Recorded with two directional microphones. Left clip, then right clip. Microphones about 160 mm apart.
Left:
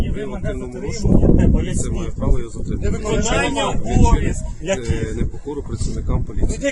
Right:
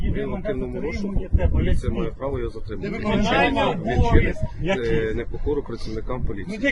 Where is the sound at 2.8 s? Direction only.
40° left (ahead or behind).